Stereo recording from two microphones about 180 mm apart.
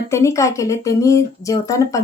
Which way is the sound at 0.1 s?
15° left (ahead or behind).